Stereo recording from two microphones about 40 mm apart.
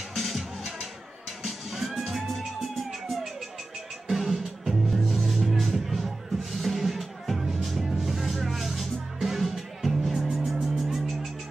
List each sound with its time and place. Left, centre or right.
0.1 s music: centre
2.0 s music: centre